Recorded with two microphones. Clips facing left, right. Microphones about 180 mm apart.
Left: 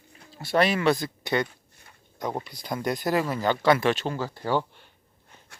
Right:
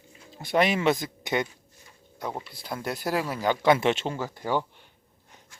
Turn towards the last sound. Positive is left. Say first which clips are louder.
# left 1 dB
turn(degrees=-15)  # may be behind; listen again after turning